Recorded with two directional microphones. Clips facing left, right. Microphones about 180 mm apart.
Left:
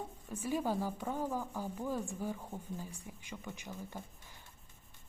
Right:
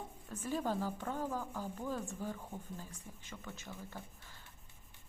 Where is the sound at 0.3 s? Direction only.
10° left (ahead or behind).